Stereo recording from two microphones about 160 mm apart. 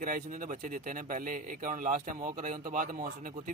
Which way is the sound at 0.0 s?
60° right (ahead or behind).